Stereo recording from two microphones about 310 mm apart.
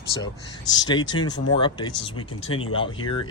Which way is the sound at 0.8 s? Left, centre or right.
Centre.